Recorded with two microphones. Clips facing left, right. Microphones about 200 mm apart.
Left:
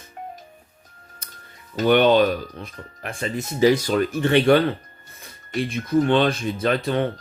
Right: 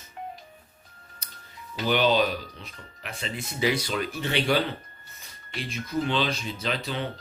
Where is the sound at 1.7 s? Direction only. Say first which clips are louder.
Left 7 dB; 55° left (ahead or behind).